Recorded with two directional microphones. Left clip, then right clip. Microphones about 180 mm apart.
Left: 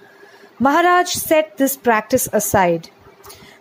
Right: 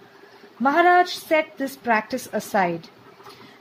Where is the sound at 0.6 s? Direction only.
45° left (ahead or behind).